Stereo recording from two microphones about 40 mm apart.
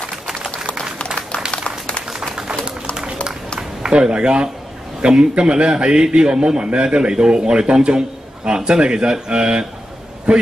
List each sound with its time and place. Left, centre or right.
1.5 s a sound: left
2.0 s bird: centre
3.8 s a man's voice: right